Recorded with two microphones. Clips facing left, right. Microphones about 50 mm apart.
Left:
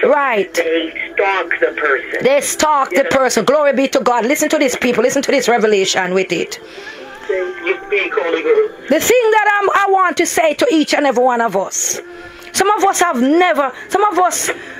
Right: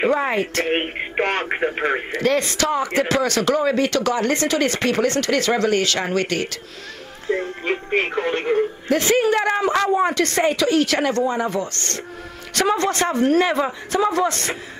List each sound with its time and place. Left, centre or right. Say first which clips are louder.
0.1 s speech: left 7 dB; left
0.7 s speech: left 6 dB; left
1.4 s speech: left 6 dB; left
2.1 s speech: left 6 dB; left
9.3 s speech: left 7 dB; left
10.5 s speech: left 6 dB; left
12.9 s speech: left 5 dB; left
14.1 s speech: left 7 dB; left